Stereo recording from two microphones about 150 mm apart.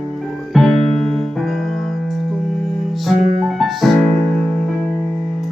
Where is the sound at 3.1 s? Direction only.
55° right (ahead or behind).